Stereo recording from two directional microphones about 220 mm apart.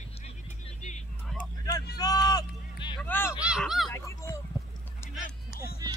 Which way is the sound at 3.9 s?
15° left (ahead or behind).